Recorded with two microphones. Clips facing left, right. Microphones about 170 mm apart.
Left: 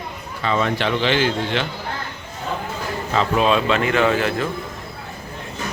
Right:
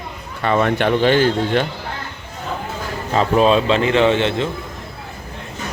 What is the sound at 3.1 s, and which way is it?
A man's voice, 35° right (ahead or behind).